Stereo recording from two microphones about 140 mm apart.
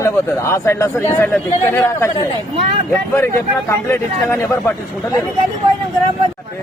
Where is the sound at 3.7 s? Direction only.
20° left (ahead or behind).